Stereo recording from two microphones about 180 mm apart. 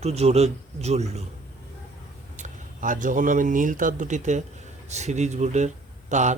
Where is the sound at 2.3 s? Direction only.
45° right (ahead or behind).